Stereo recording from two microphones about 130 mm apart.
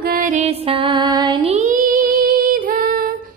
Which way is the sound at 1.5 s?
80° right.